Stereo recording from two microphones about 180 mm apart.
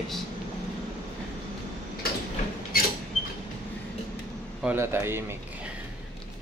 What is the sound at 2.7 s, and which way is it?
Creak, 55° left (ahead or behind).